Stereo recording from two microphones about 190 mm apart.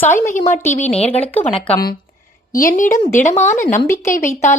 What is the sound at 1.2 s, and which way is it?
Speech, 10° left (ahead or behind).